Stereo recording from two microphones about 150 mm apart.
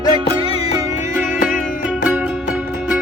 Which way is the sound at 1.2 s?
60° left (ahead or behind).